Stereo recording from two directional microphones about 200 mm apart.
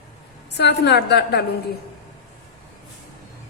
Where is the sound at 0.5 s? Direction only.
55° left (ahead or behind).